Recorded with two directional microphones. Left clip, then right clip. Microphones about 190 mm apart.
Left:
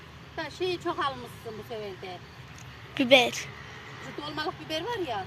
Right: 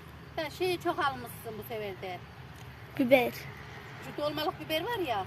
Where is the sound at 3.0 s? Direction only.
5° right (ahead or behind).